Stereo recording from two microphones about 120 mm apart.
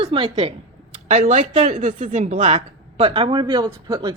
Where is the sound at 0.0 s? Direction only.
45° right (ahead or behind).